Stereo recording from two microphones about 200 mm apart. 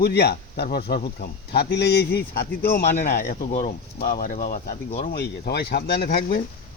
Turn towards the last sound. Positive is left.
turn(degrees=50)  # may be behind; listen again after turning